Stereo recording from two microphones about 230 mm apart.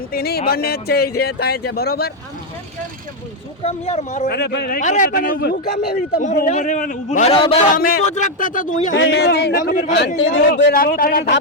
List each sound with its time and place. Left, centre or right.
0.1 s speech: left
3.6 s speech: left
4.3 s a man's voice: left
7.8 s a man's voice: left
9.0 s a man's voice: left